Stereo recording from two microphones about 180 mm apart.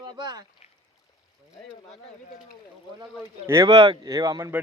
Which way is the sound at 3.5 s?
20° right (ahead or behind).